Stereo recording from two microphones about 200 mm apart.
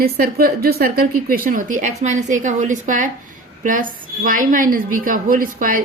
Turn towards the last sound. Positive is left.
turn(degrees=-45)  # may be behind; listen again after turning